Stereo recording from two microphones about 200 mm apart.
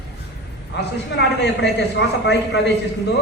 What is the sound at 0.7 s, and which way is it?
A man's voice, 60° left (ahead or behind).